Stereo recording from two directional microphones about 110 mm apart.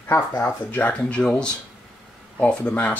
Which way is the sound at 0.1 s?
25° left (ahead or behind).